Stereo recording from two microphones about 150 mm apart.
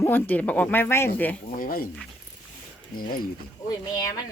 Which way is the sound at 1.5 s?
70° left (ahead or behind).